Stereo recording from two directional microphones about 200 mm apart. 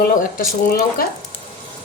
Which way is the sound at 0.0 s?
50° left (ahead or behind).